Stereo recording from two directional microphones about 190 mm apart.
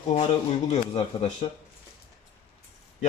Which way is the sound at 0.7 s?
35° left (ahead or behind).